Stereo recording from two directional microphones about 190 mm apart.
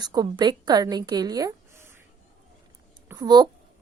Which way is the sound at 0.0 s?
20° right (ahead or behind).